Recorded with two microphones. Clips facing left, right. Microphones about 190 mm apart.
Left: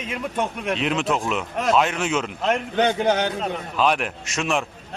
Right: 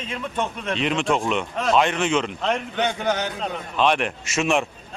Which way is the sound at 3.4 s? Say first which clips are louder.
Even; 5° left (ahead or behind).